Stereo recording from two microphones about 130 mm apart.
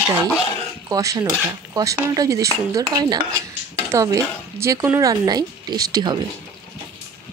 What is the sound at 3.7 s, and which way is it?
Speech, 25° right (ahead or behind).